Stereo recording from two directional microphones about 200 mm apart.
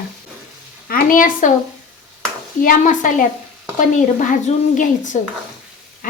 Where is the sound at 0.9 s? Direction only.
45° left (ahead or behind).